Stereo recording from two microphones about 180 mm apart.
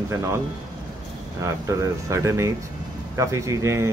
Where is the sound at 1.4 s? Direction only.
15° right (ahead or behind).